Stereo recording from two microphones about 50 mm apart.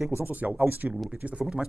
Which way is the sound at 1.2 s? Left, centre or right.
Right.